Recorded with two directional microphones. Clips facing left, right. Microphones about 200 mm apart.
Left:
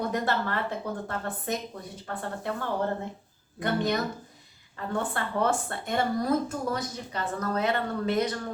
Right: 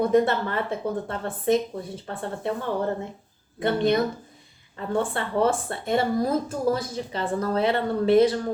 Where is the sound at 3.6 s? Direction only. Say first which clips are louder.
Right 5 dB; 25° right (ahead or behind).